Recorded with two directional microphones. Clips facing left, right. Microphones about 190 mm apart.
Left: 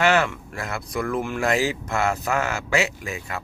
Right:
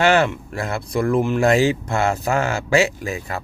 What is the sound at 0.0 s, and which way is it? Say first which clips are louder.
Speech: right 4 dB; 30° right (ahead or behind).